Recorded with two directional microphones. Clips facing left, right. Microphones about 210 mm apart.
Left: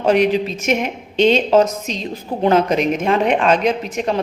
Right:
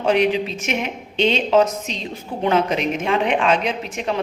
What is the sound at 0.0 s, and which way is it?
A woman's voice, 40° left (ahead or behind).